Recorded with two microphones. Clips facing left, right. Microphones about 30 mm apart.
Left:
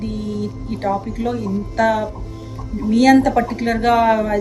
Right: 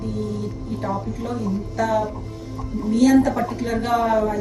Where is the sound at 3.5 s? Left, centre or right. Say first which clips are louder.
Left 5 dB; left.